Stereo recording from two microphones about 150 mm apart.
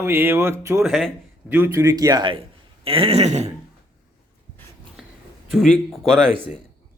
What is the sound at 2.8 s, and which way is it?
Throat clearing, 40° right (ahead or behind).